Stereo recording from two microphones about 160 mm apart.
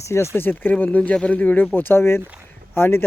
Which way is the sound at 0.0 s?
15° left (ahead or behind).